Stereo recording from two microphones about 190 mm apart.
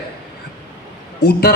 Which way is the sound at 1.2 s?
55° left (ahead or behind).